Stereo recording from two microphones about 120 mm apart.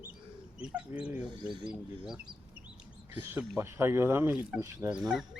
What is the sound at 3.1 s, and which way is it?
Speech, 15° right (ahead or behind).